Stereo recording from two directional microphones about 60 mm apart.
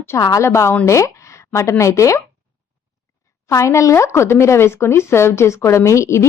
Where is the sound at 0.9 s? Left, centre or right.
Left.